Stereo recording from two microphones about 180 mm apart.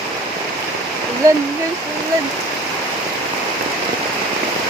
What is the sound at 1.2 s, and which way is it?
Speech, 20° right (ahead or behind).